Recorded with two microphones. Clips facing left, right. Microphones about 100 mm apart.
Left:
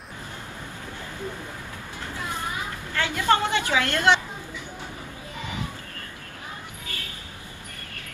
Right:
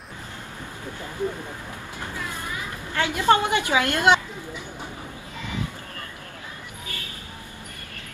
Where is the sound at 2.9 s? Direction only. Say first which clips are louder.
Right 3 dB; 20° right (ahead or behind).